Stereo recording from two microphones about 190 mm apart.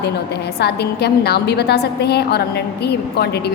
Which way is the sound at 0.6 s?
60° left (ahead or behind).